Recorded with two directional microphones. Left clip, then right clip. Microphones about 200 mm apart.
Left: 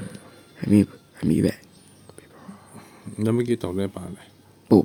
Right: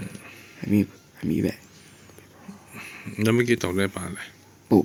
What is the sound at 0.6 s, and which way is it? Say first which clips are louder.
Speech: left 4 dB; 45° left (ahead or behind).